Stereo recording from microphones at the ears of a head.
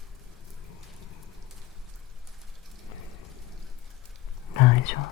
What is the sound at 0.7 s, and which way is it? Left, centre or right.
Rain, left.